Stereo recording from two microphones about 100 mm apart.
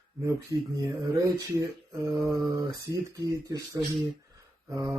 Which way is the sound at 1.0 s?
35° right (ahead or behind).